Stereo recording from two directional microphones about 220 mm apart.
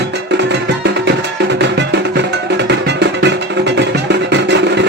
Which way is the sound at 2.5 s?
50° right (ahead or behind).